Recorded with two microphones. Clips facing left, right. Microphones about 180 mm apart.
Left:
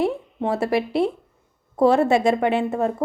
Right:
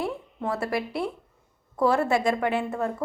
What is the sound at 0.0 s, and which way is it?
A woman's voice, 25° left (ahead or behind).